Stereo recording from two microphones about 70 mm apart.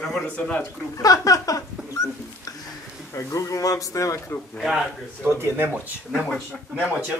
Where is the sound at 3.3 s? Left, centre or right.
Left.